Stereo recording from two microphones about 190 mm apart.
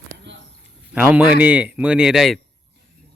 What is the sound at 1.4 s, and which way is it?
Speech, 10° right (ahead or behind).